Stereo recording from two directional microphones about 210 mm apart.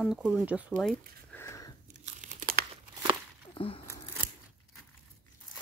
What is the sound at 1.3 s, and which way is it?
Sniff, 10° left (ahead or behind).